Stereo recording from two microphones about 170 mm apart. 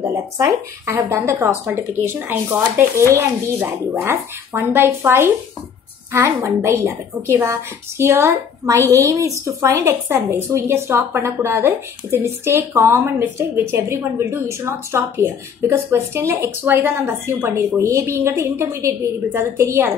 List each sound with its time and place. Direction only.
0.0 s a woman's voice: 20° right (ahead or behind)